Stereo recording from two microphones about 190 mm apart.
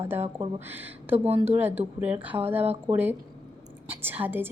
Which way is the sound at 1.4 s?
10° right (ahead or behind).